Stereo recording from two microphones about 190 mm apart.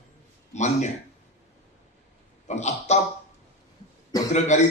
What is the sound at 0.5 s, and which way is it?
Speech, 35° left (ahead or behind).